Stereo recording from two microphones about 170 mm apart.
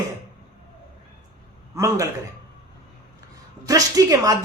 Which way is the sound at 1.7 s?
20° right (ahead or behind).